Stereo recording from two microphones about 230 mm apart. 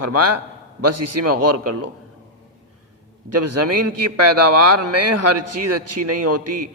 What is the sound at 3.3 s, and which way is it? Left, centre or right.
A man's voice, right.